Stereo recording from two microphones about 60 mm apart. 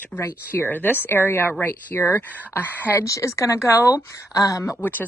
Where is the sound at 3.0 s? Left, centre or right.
Left.